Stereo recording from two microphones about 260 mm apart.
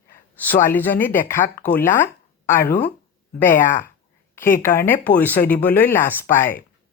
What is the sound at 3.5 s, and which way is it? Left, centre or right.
Speech, left.